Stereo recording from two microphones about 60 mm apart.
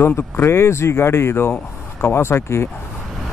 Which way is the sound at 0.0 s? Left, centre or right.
Left.